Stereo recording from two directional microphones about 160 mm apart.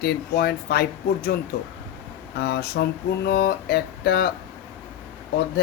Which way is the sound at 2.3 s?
90° left.